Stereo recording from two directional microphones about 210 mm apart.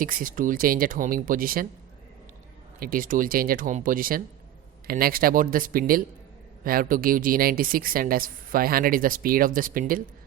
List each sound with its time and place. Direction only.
0.0 s speech: 40° right (ahead or behind)
2.8 s speech: 40° right (ahead or behind)